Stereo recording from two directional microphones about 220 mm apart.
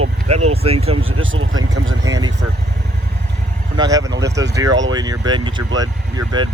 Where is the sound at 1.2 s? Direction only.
65° right (ahead or behind).